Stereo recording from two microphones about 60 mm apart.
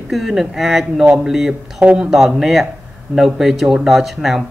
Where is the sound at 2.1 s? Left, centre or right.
Centre.